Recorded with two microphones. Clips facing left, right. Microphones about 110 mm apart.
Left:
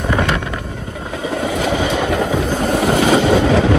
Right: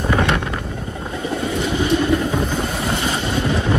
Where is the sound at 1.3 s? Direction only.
65° left (ahead or behind).